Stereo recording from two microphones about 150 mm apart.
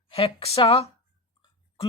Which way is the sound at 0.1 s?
40° left (ahead or behind).